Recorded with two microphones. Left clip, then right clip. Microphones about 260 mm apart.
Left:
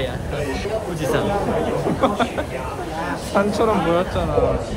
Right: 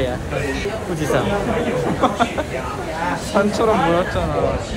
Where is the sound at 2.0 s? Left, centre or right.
Centre.